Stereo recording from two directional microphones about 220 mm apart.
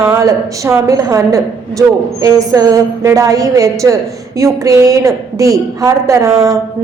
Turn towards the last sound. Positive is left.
turn(degrees=-15)  # may be behind; listen again after turning